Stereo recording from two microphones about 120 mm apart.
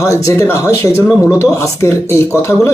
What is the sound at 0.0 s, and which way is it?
A man's voice, 25° left (ahead or behind).